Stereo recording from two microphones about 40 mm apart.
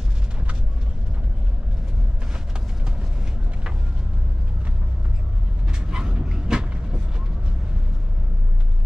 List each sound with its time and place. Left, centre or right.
5.7 s vehicle: right